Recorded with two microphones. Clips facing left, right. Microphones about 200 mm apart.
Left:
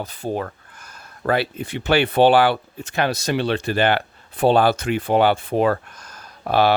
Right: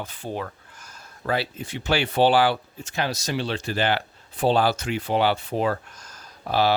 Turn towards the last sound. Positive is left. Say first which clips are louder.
# left 4 dB
turn(degrees=60)  # may be behind; listen again after turning